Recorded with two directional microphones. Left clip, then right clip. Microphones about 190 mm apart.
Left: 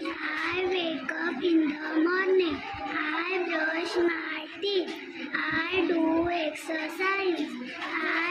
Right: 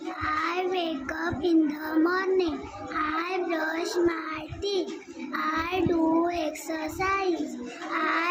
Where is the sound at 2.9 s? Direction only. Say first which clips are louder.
Right 2 dB; 30° right (ahead or behind).